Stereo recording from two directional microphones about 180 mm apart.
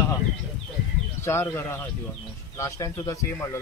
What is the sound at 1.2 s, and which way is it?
Speech, 15° left (ahead or behind).